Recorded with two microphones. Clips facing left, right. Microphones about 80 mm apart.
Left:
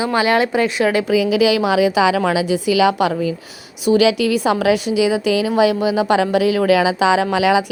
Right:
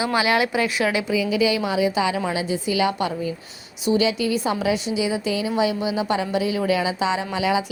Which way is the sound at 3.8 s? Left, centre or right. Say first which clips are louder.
Left 6 dB; left.